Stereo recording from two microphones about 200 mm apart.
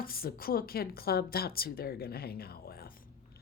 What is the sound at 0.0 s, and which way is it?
Speech, 50° left (ahead or behind).